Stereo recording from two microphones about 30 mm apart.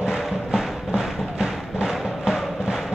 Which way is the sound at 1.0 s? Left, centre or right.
Centre.